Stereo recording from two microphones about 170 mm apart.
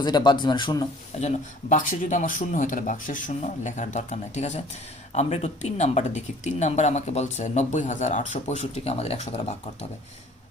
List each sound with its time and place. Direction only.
0.0 s speech: 25° left (ahead or behind)
1.1 s speech: 40° left (ahead or behind)
1.7 s speech: 50° left (ahead or behind)